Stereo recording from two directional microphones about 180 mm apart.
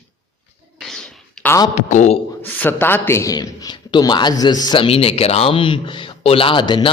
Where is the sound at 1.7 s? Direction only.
40° left (ahead or behind).